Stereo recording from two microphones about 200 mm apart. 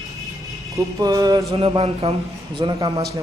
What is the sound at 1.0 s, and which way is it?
Speech, 20° right (ahead or behind).